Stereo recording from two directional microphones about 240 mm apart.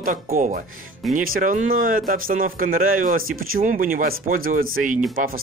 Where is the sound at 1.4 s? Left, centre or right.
Right.